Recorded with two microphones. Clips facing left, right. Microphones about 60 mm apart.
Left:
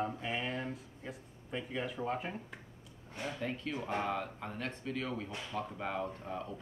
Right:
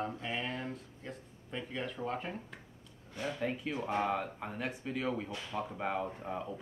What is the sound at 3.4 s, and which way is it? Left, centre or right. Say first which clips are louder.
Speech: right 3 dB; centre.